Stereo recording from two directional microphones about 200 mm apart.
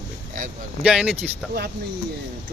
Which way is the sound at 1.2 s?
55° right (ahead or behind).